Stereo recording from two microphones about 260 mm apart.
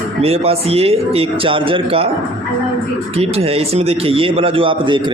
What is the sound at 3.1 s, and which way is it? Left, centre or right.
A man's voice, right.